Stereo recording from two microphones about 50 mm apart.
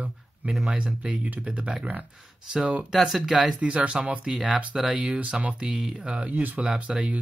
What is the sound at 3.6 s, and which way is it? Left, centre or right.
Speech, right.